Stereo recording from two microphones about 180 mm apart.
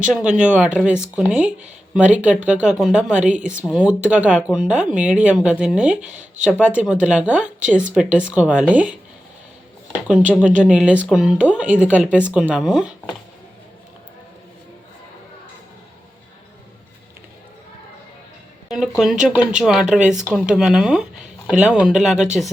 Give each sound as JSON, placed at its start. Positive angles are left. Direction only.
{"t": 0.0, "sound": "speech", "side_deg": -5}
{"t": 3.3, "sound": "speech", "side_deg": -45}
{"t": 3.6, "sound": "speech", "side_deg": -5}
{"t": 10.1, "sound": "speech", "side_deg": -5}
{"t": 18.7, "sound": "speech", "side_deg": 0}